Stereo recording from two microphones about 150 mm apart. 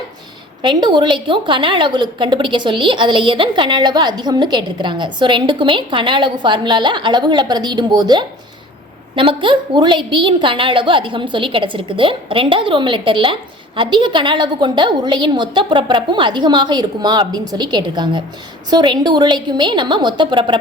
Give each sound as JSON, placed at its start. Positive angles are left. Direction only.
{"t": 0.6, "sound": "a woman's voice", "side_deg": -30}